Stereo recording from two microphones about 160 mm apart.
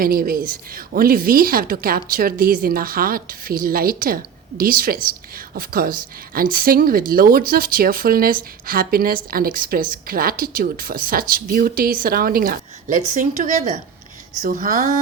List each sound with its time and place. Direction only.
0.0 s speech: 65° right (ahead or behind)